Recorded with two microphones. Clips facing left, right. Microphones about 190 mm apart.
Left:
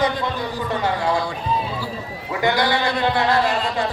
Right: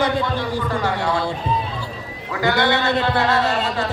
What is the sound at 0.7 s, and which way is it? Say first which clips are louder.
Speech: left 3 dB; 25° left (ahead or behind).